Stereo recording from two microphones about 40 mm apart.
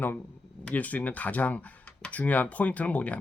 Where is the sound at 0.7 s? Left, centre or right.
Left.